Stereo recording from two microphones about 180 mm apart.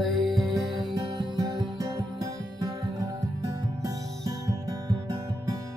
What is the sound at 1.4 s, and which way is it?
Music, 20° right (ahead or behind).